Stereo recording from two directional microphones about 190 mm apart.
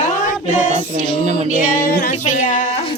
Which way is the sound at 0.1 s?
45° left (ahead or behind).